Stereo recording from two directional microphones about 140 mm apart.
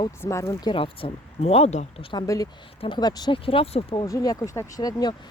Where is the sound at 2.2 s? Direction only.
25° left (ahead or behind); by 4.0 s 40° left (ahead or behind).